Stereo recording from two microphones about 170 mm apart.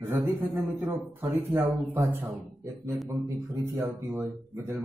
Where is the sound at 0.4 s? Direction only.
10° right (ahead or behind).